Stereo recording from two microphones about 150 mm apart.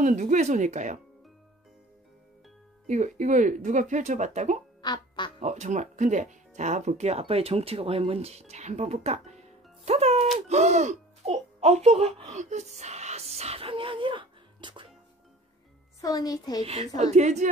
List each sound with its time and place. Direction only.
0.0 s speech: 55° right (ahead or behind)
2.9 s speech: 50° right (ahead or behind)
4.8 s quack: 30° left (ahead or behind)
5.4 s speech: 50° right (ahead or behind)
10.5 s music: 50° right (ahead or behind); by 14.9 s 35° right (ahead or behind)
16.0 s a woman's voice: 25° left (ahead or behind)
16.6 s speech: 45° right (ahead or behind)